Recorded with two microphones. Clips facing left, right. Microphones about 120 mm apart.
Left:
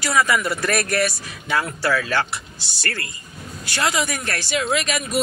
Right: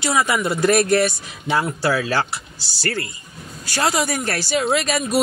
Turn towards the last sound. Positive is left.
turn(degrees=-35)  # may be behind; listen again after turning